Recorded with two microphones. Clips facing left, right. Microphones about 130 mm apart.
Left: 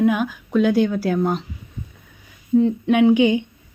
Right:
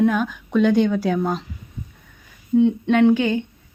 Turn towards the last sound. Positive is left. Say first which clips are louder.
# left 1 dB
turn(degrees=15)  # may be behind; listen again after turning